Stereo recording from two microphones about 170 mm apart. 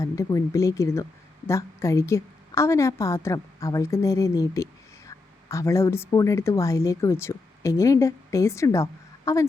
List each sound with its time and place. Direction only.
0.0 s a woman's voice: 20° left (ahead or behind)